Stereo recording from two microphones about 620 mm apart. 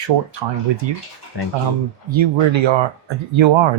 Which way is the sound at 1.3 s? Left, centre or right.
Left.